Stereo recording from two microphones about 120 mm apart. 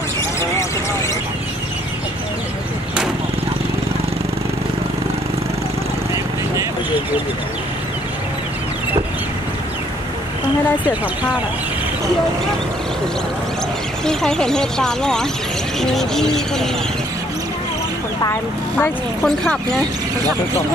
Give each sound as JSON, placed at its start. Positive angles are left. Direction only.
{"t": 14.0, "sound": "speech", "side_deg": 5}
{"t": 18.2, "sound": "speech", "side_deg": 20}
{"t": 19.2, "sound": "speech", "side_deg": 5}